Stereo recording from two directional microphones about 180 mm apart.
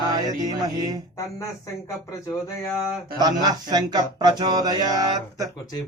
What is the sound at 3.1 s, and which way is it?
Music, 20° right (ahead or behind).